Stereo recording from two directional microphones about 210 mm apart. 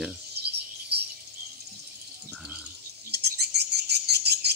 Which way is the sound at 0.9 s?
50° right (ahead or behind).